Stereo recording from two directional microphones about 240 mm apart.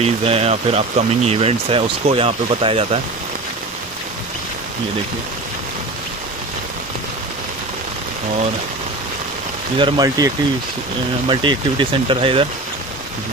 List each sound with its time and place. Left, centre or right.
0.0 s speech: right
9.8 s speech: centre